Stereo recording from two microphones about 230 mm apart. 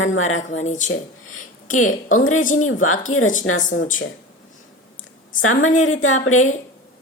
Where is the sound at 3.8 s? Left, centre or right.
Left.